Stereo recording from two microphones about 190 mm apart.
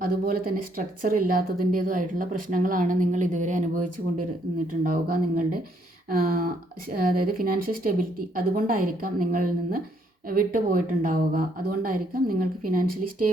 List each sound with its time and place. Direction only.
0.0 s speech: 50° right (ahead or behind)